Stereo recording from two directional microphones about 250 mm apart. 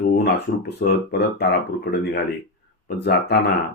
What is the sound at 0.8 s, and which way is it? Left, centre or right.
Speech, left.